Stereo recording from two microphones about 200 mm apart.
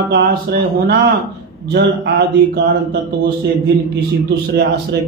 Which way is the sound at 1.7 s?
55° right (ahead or behind).